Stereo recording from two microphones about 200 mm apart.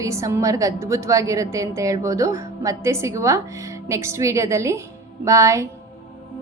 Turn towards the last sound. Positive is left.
turn(degrees=-15)  # may be behind; listen again after turning